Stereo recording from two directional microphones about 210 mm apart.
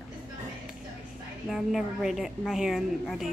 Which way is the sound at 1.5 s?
Centre (ahead or behind).